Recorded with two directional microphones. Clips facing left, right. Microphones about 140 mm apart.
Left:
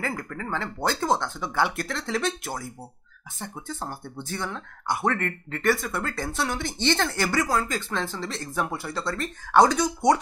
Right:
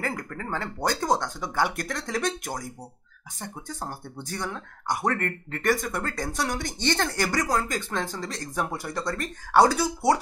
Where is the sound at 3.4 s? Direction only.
15° right (ahead or behind).